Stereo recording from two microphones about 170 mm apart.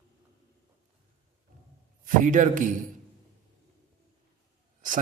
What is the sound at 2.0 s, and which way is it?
Speech, 50° right (ahead or behind).